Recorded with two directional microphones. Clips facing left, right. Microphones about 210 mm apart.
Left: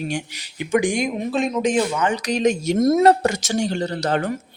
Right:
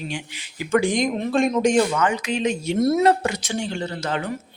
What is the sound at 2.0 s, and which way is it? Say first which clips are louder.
Speech: left 3 dB; 35° left (ahead or behind).